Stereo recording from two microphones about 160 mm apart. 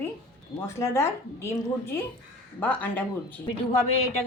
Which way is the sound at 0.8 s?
15° left (ahead or behind).